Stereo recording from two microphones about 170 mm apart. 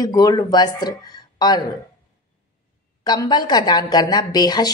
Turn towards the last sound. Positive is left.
turn(degrees=25)  # may be behind; listen again after turning